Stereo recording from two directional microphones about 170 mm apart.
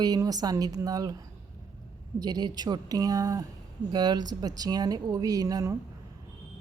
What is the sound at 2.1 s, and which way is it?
A woman's voice, 25° right (ahead or behind).